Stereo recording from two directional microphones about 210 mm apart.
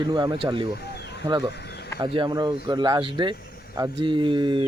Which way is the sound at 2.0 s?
25° right (ahead or behind).